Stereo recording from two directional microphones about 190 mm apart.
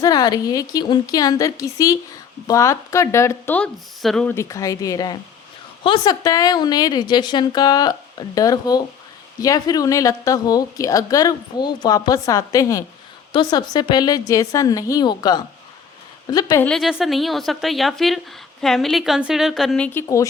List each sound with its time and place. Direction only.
0.0 s a woman's voice: 20° left (ahead or behind)
16.6 s speech: centre (ahead or behind)